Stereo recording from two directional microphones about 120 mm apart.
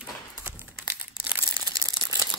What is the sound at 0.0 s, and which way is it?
Crumpling, 15° right (ahead or behind).